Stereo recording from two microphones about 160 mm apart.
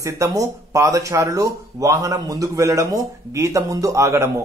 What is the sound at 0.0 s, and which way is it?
Speech, 20° right (ahead or behind).